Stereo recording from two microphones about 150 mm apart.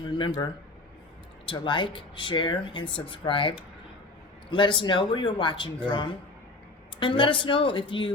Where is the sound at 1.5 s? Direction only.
30° left (ahead or behind).